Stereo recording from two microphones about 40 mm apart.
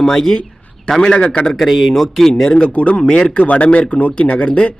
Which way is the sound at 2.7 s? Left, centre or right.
Left.